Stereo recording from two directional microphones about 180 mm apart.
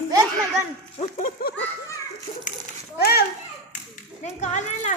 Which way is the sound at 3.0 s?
60° left (ahead or behind).